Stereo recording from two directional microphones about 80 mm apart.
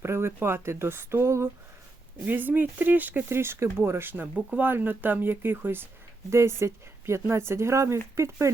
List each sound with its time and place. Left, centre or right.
0.0 s speech: right
2.2 s speech: right